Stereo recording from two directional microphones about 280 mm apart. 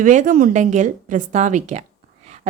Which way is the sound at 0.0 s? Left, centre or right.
Right.